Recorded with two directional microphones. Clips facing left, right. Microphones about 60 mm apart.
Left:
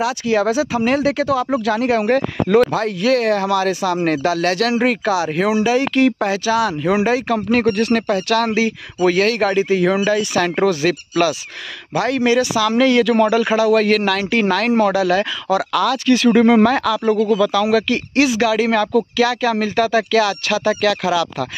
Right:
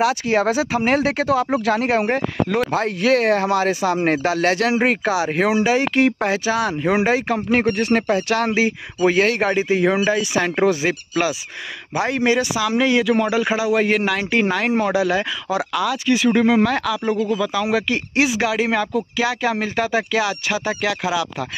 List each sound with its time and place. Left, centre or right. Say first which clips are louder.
0.0 s speech: even; right; by 16.3 s centre
16.3 s speech: left 4 dB; centre
17.4 s speech: left 5 dB; right